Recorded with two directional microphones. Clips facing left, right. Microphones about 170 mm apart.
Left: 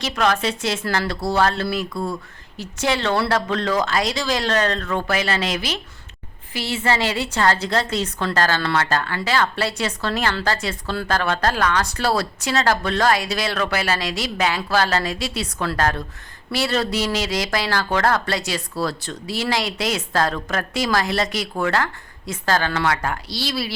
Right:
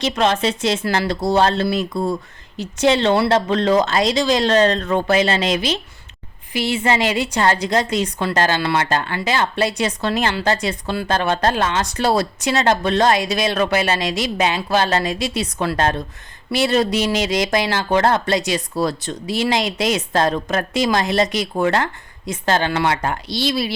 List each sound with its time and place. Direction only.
0.0 s a woman's voice: 20° right (ahead or behind)